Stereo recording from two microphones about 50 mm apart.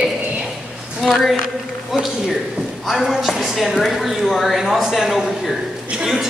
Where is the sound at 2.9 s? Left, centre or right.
Centre.